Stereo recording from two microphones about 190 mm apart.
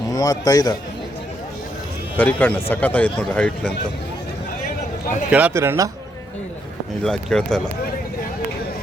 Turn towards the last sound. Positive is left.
turn(degrees=5)  # may be behind; listen again after turning